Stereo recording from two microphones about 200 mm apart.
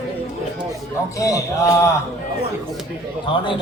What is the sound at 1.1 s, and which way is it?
Speech, 15° left (ahead or behind).